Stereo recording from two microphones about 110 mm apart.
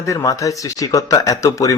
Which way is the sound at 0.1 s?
30° left (ahead or behind).